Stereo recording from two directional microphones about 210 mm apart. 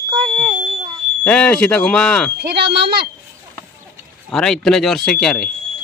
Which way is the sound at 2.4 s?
50° right (ahead or behind).